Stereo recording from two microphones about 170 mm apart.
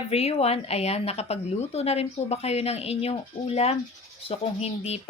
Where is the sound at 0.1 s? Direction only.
35° left (ahead or behind).